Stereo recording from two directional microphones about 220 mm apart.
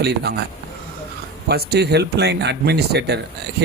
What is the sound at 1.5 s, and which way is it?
Speech, 45° right (ahead or behind).